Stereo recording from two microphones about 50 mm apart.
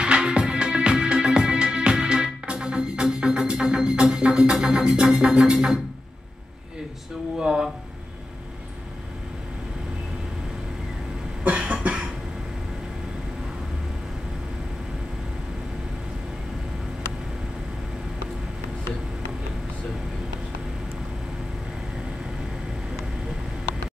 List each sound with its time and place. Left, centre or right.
0.0 s music: centre
7.3 s a sound: centre
11.4 s cough: right